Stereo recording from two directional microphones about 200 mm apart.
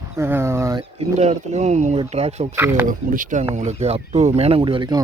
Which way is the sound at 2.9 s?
40° right (ahead or behind).